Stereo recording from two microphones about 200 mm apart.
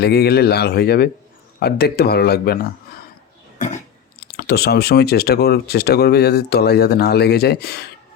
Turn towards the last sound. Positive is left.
turn(degrees=55)  # may be behind; listen again after turning